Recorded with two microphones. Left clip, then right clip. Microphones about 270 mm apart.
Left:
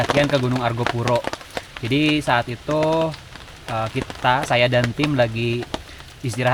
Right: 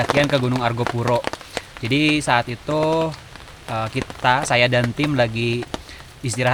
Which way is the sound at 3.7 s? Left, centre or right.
Centre.